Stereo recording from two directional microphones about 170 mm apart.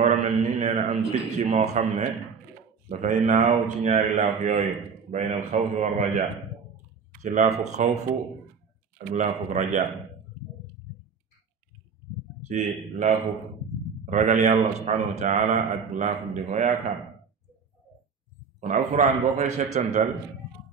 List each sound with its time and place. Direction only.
0.0 s mantra: 40° right (ahead or behind)
1.4 s a man's voice: 40° right (ahead or behind)
12.4 s a man's voice: 45° right (ahead or behind)
18.6 s a man's voice: 45° right (ahead or behind)